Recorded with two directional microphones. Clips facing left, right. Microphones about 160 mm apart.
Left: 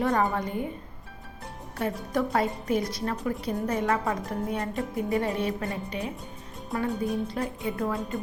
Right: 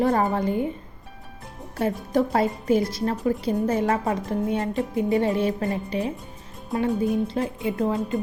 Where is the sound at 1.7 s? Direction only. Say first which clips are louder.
Right 5 dB; 30° right (ahead or behind).